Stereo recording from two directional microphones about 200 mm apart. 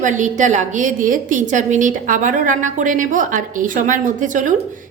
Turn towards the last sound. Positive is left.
turn(degrees=-40)  # may be behind; listen again after turning